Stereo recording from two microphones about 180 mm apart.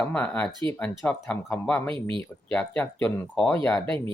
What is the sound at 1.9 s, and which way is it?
Speech, 30° right (ahead or behind).